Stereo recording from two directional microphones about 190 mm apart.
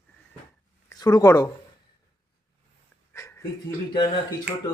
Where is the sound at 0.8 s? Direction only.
20° left (ahead or behind).